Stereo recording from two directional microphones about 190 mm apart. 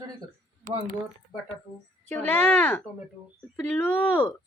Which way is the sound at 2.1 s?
10° left (ahead or behind).